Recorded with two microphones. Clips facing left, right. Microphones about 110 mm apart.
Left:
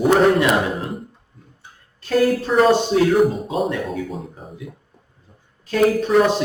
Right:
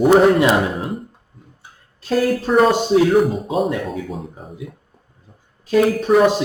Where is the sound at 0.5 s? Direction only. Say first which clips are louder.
Right 2 dB; centre (ahead or behind).